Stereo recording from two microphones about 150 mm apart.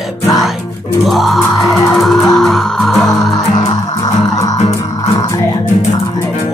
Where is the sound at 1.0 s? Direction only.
Centre (ahead or behind).